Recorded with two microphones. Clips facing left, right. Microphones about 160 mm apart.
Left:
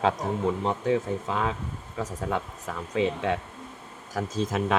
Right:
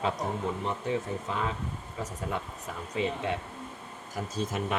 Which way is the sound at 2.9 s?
90° left.